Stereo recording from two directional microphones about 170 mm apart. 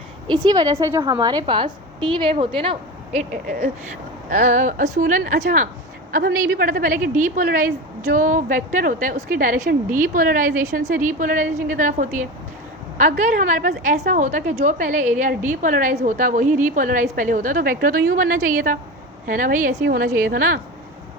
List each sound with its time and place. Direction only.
0.3 s a woman's voice: 25° right (ahead or behind); by 5.6 s 50° right (ahead or behind)
6.1 s a woman's voice: 65° right (ahead or behind)